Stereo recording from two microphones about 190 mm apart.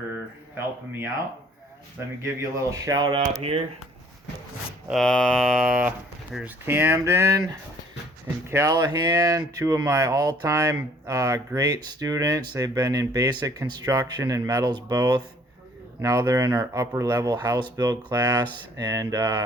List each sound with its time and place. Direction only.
0.5 s speech: 10° right (ahead or behind)
2.2 s speech: 15° right (ahead or behind); by 3.7 s 30° right (ahead or behind)
4.9 s a sound: 5° left (ahead or behind)
6.3 s speech: 10° right (ahead or behind)